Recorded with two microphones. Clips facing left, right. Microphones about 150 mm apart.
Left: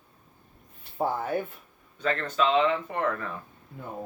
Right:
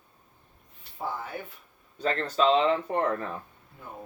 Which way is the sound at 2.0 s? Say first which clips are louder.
Right 1 dB; 35° right (ahead or behind).